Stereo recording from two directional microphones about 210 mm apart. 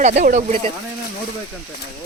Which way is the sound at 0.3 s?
35° right (ahead or behind).